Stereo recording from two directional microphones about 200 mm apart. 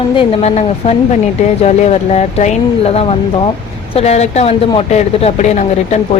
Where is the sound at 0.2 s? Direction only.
30° left (ahead or behind).